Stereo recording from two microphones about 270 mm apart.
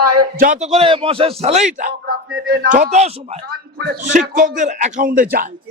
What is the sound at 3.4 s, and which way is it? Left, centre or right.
Speech, right.